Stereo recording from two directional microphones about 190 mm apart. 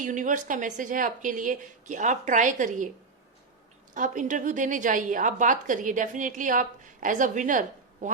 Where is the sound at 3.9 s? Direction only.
40° right (ahead or behind).